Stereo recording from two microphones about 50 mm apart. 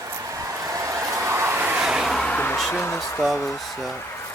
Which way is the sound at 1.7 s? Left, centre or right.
Centre.